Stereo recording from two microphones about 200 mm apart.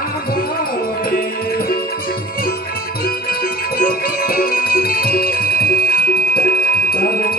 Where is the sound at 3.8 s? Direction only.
45° left (ahead or behind).